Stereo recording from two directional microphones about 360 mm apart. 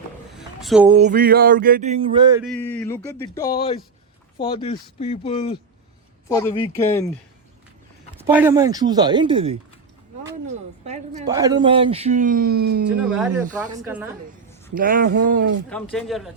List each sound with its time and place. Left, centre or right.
0.3 s a sound: centre
0.9 s speech: centre
2.5 s speech: centre
8.2 s speech: centre
10.8 s speech: centre
13.1 s speech: centre
14.8 s speech: right
15.7 s speech: centre